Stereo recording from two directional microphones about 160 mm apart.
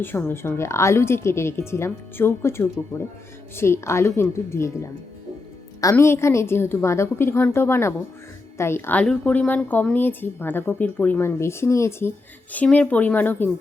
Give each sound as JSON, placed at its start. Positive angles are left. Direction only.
{"t": 0.0, "sound": "a woman's voice", "side_deg": 10}